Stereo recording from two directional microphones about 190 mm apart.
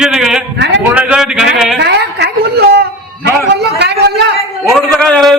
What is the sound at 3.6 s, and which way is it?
Speech, 60° right (ahead or behind).